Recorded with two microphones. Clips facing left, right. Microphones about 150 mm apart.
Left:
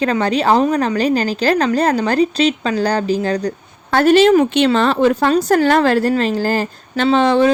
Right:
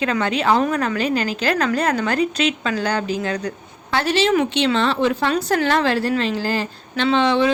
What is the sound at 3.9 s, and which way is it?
A woman's voice, 50° left (ahead or behind).